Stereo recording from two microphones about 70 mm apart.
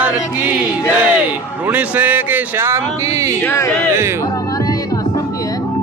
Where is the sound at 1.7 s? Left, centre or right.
Right.